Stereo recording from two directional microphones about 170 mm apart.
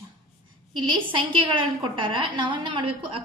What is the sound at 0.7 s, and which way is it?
A woman's voice, 30° right (ahead or behind).